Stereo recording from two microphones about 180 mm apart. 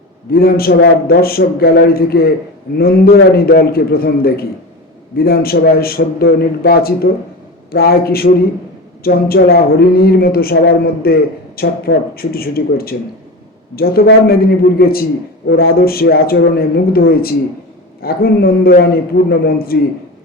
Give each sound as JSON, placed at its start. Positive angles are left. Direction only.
{"t": 0.3, "sound": "speech", "side_deg": 55}